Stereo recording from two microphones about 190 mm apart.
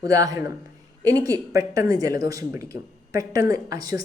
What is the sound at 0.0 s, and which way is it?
A woman's voice, 20° right (ahead or behind).